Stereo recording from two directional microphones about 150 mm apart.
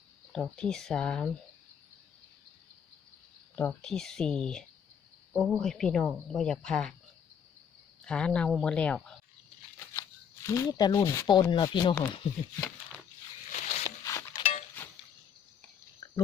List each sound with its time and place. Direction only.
0.3 s speech: 5° left (ahead or behind)
3.5 s speech: 5° left (ahead or behind)
8.0 s speech: 5° left (ahead or behind)
10.4 s speech: 20° left (ahead or behind)
13.5 s zipper: 50° left (ahead or behind)
13.8 s a sound: 20° left (ahead or behind)
14.8 s a sound: 10° left (ahead or behind)
16.0 s pig: 20° left (ahead or behind)